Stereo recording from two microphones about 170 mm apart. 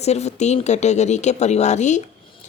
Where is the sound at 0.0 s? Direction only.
40° left (ahead or behind).